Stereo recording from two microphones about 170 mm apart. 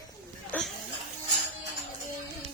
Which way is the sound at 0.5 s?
10° left (ahead or behind).